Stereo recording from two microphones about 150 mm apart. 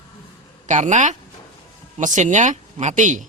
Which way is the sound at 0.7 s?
55° right (ahead or behind).